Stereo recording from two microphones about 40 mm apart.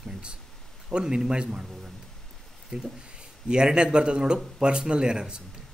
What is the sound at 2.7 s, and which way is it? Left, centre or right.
Speech, right.